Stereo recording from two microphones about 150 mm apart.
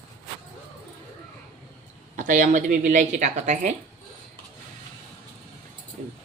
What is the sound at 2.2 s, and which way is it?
Speech, 55° right (ahead or behind).